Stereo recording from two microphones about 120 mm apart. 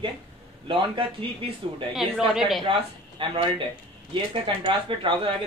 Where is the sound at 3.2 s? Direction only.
45° right (ahead or behind).